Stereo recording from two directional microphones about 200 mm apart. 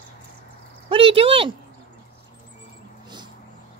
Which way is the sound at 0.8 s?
25° right (ahead or behind).